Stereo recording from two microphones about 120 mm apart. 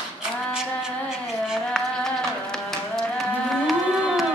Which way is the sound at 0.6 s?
5° right (ahead or behind).